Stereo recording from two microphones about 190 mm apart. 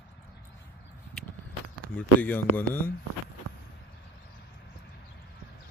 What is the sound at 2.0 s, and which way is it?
Speech, 10° left (ahead or behind).